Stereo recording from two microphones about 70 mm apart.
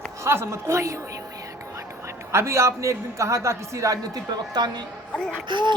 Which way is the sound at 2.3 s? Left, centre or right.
Right.